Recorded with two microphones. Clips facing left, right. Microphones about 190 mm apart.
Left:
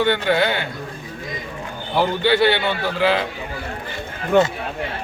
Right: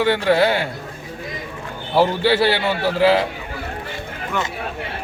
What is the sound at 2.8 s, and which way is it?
Speech, 30° right (ahead or behind).